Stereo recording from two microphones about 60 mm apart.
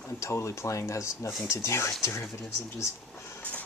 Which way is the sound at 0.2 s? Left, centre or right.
Left.